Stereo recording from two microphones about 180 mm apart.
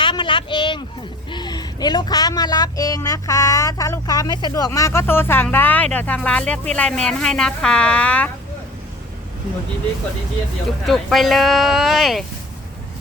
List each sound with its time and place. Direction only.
0.0 s a sound: 25° left (ahead or behind)
1.3 s speech: 25° left (ahead or behind); by 8.3 s 5° left (ahead or behind)
10.8 s speech: centre (ahead or behind)